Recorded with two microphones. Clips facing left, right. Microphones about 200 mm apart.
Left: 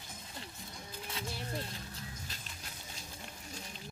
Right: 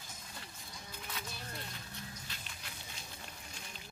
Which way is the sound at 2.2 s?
40° left (ahead or behind).